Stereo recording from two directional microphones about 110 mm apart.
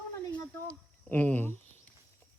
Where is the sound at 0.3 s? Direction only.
10° left (ahead or behind).